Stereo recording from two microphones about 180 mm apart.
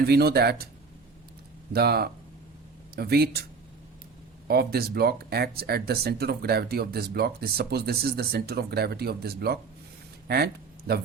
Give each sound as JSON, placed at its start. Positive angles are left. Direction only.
{"t": 0.0, "sound": "speech", "side_deg": -60}
{"t": 1.7, "sound": "speech", "side_deg": -60}
{"t": 4.4, "sound": "speech", "side_deg": -60}